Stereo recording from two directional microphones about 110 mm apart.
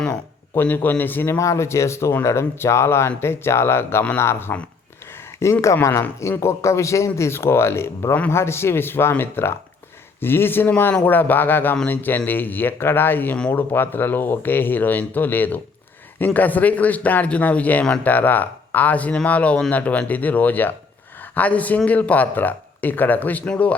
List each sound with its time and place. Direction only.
0.1 s speech: 20° left (ahead or behind)
5.6 s a man's voice: 25° left (ahead or behind)